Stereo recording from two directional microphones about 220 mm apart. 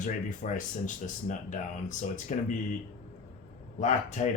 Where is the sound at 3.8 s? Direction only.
30° left (ahead or behind).